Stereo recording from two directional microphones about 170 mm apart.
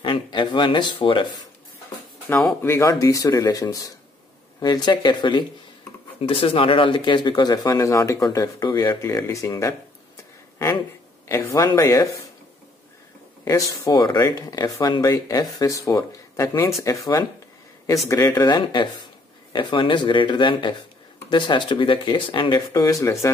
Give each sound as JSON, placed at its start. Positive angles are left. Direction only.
{"t": 0.0, "sound": "speech", "side_deg": 30}
{"t": 2.6, "sound": "speech", "side_deg": 15}
{"t": 11.2, "sound": "speech", "side_deg": 15}
{"t": 13.5, "sound": "speech", "side_deg": 20}